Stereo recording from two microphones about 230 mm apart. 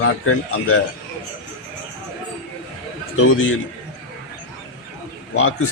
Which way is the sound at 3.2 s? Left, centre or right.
Left.